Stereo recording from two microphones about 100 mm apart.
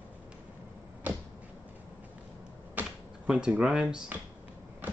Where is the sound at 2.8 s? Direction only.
15° right (ahead or behind).